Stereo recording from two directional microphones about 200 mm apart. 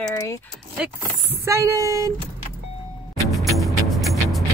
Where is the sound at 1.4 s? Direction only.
15° right (ahead or behind).